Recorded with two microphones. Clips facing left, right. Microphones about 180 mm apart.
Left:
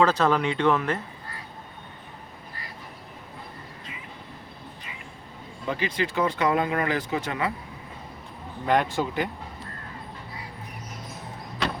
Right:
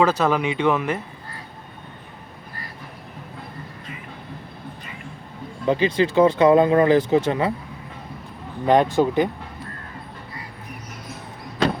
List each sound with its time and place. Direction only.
0.0 s speech: 5° right (ahead or behind)
5.6 s speech: 25° right (ahead or behind)
8.6 s speech: 20° right (ahead or behind)